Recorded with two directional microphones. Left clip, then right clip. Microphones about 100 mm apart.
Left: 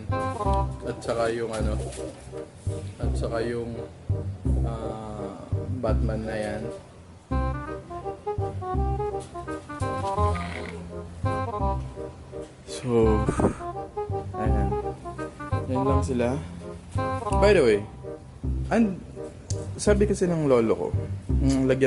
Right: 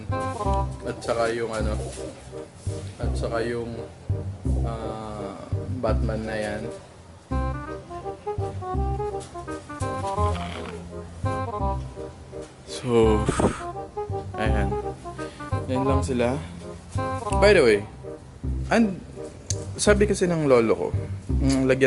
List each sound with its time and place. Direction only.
0.1 s music: centre (ahead or behind)
3.0 s speech: 5° left (ahead or behind)
4.6 s music: 10° left (ahead or behind)
5.8 s a man's voice: 10° left (ahead or behind)
7.3 s music: centre (ahead or behind)
14.7 s music: centre (ahead or behind)
17.0 s speech: centre (ahead or behind)
19.5 s music: centre (ahead or behind)
20.1 s a man's voice: centre (ahead or behind)
21.3 s a sound: centre (ahead or behind)